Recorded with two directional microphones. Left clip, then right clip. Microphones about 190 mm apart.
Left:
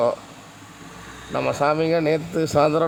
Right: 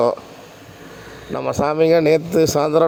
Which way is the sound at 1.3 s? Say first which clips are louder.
Right 2 dB; 25° right (ahead or behind).